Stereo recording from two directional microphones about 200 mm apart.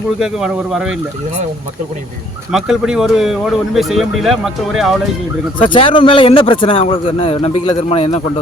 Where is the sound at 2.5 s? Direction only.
5° right (ahead or behind).